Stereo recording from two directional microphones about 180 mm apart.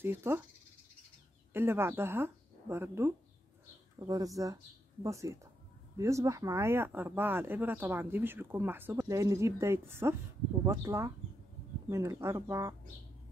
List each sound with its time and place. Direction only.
0.0 s speech: 15° right (ahead or behind)
1.5 s speech: 15° right (ahead or behind)